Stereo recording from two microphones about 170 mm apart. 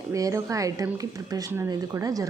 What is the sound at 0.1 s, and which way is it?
Speech, 20° right (ahead or behind).